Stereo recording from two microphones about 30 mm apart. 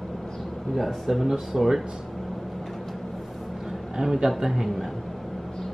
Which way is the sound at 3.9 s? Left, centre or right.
Centre.